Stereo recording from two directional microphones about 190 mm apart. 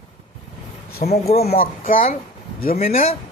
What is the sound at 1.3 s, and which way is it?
Speech, 35° left (ahead or behind).